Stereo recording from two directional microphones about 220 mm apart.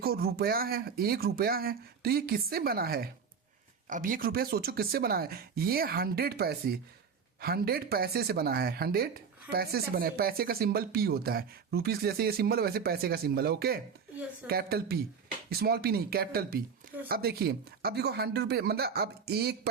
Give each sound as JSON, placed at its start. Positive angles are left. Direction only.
{"t": 0.0, "sound": "speech", "side_deg": -45}